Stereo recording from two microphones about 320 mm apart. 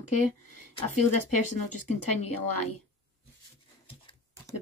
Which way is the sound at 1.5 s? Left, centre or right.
Left.